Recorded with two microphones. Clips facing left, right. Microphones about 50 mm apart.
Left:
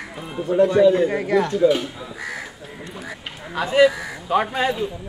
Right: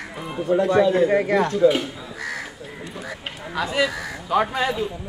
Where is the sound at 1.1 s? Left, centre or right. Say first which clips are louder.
Right 1 dB; right.